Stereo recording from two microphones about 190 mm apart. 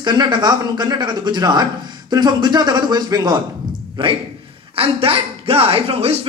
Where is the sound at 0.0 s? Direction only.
20° right (ahead or behind).